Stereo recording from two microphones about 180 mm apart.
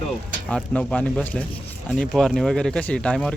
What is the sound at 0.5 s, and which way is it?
Speech, 5° left (ahead or behind).